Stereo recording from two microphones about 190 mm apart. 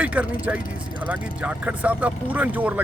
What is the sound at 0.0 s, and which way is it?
Speech, 5° right (ahead or behind).